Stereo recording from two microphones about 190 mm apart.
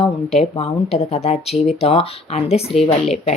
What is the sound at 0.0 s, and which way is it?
Speech, 30° left (ahead or behind).